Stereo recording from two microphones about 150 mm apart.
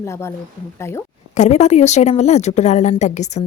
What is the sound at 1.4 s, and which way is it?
A woman's voice, 50° left (ahead or behind).